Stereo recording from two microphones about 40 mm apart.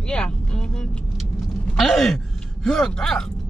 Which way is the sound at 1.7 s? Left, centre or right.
Centre.